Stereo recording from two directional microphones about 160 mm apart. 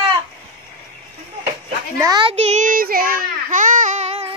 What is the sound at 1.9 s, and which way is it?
Speech, 25° right (ahead or behind).